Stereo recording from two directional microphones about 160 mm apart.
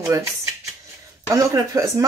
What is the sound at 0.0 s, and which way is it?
Speech, 20° right (ahead or behind).